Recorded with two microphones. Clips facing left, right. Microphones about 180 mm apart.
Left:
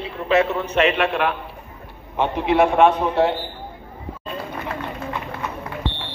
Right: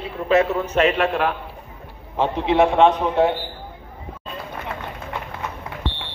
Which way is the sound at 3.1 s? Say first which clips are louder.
Right 1 dB; 15° right (ahead or behind).